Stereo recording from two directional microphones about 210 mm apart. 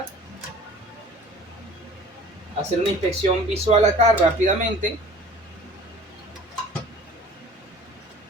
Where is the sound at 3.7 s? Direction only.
25° right (ahead or behind).